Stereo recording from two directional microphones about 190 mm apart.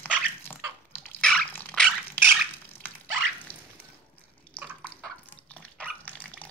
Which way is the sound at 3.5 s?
10° left (ahead or behind).